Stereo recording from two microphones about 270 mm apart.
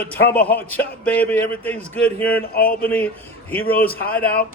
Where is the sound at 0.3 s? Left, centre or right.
Centre.